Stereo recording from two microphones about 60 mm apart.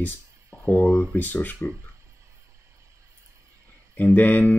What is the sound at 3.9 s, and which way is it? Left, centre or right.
Speech, left.